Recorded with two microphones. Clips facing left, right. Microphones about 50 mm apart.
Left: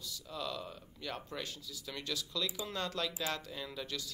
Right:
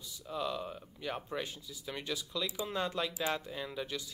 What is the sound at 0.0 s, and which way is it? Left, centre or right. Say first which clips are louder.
Speech: right 4 dB; right.